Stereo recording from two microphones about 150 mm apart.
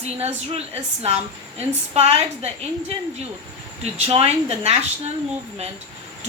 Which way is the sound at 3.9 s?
40° right (ahead or behind).